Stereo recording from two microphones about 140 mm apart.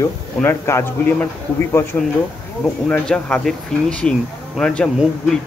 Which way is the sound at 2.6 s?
5° left (ahead or behind).